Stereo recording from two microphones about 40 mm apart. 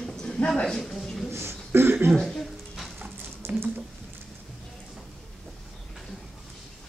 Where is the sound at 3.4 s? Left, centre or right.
Right.